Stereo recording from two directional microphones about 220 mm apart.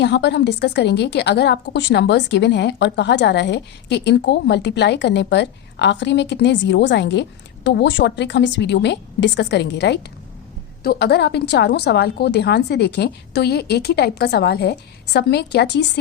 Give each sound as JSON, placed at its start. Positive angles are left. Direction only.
{"t": 0.0, "sound": "a woman's voice", "side_deg": 50}